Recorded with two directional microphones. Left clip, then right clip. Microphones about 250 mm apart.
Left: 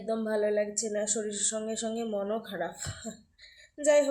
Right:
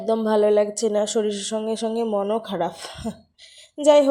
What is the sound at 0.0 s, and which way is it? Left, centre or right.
Speech, right.